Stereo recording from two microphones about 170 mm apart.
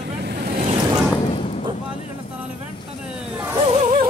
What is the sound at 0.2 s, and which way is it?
Waves, 70° right (ahead or behind).